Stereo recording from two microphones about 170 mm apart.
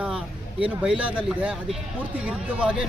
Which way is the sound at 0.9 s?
5° right (ahead or behind).